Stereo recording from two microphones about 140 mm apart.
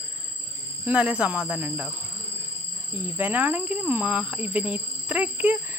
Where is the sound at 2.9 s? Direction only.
10° right (ahead or behind).